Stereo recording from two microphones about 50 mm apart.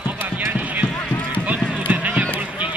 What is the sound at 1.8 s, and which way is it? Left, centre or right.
Run, right.